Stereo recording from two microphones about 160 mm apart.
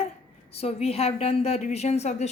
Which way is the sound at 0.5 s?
40° left (ahead or behind).